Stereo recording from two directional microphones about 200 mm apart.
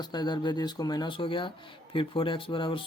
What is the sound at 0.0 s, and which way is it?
Speech, 20° left (ahead or behind).